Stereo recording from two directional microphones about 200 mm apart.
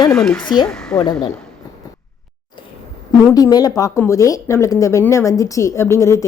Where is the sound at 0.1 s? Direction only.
5° left (ahead or behind).